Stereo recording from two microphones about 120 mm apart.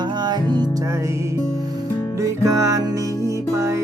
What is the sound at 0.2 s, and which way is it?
Music, 35° right (ahead or behind).